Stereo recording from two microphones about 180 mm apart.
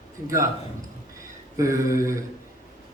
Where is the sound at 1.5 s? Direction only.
15° right (ahead or behind).